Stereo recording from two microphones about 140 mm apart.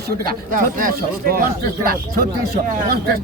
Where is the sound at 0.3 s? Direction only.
80° right.